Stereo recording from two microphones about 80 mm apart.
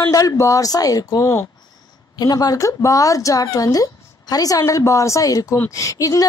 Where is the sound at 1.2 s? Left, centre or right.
Left.